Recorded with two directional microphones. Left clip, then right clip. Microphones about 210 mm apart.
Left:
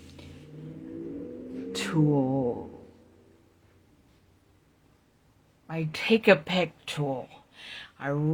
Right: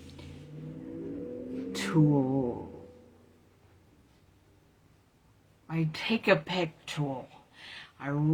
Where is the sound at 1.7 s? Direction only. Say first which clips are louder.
Left 1 dB; 30° left (ahead or behind).